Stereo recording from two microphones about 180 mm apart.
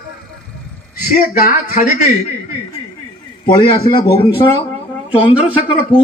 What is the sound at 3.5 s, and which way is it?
A man's voice, 25° left (ahead or behind).